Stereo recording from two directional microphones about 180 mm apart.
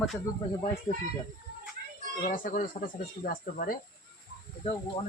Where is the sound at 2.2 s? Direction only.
45° left (ahead or behind).